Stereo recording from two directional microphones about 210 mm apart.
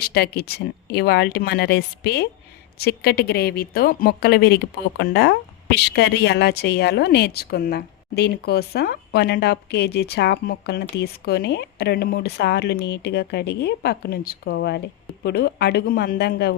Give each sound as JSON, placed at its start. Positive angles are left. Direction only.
{"t": 0.0, "sound": "a woman's voice", "side_deg": 50}